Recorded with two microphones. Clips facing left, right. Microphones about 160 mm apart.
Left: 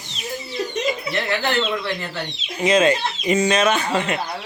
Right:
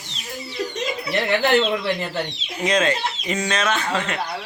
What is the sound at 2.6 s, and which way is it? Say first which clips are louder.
Speech: left 4 dB; 5° left (ahead or behind).